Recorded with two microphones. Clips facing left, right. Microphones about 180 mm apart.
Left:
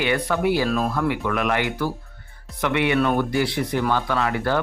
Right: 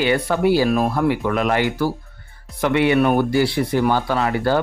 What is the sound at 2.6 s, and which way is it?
Speech, 35° right (ahead or behind).